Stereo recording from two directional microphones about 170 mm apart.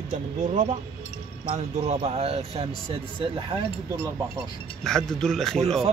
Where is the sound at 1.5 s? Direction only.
35° right (ahead or behind).